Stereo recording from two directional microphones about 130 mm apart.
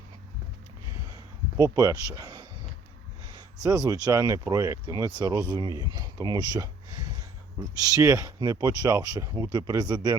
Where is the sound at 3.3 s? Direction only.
25° right (ahead or behind).